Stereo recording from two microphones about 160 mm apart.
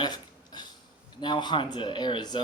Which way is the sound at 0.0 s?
25° left (ahead or behind).